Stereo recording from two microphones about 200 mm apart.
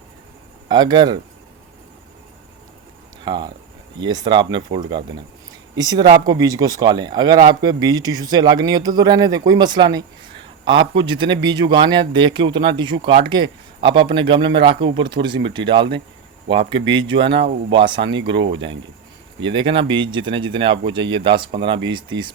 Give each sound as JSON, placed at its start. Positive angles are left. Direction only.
{"t": 0.7, "sound": "speech", "side_deg": -20}
{"t": 3.2, "sound": "speech", "side_deg": -20}
{"t": 18.3, "sound": "speech", "side_deg": -65}
{"t": 19.4, "sound": "speech", "side_deg": -25}